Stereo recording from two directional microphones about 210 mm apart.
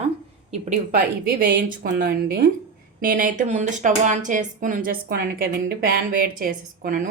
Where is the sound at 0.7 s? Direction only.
45° right (ahead or behind).